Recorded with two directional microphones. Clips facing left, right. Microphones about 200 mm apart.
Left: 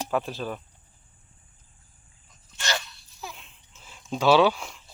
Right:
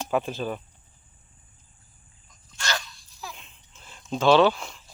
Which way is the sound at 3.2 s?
Centre (ahead or behind).